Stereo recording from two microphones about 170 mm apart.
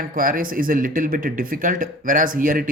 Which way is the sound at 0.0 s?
55° right (ahead or behind).